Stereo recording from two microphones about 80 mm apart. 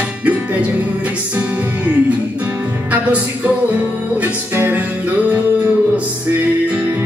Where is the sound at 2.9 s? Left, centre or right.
Centre.